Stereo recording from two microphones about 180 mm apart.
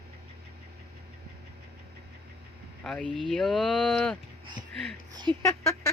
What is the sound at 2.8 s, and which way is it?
Speech, 5° left (ahead or behind).